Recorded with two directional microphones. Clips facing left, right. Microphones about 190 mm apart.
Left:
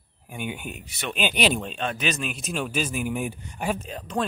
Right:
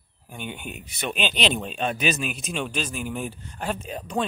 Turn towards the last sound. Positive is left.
turn(degrees=-10)  # may be behind; listen again after turning